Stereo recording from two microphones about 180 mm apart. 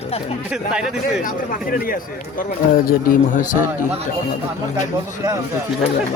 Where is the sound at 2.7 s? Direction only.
55° left (ahead or behind).